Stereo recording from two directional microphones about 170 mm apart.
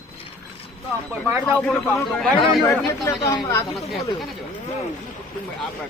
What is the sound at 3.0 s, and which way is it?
Speech, 20° left (ahead or behind).